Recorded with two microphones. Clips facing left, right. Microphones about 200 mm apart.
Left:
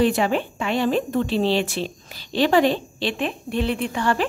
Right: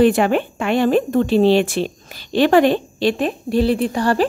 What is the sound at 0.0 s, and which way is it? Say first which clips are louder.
Speech: right 5 dB; 55° right (ahead or behind).